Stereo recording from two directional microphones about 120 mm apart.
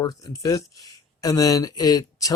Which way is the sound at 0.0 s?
30° left (ahead or behind).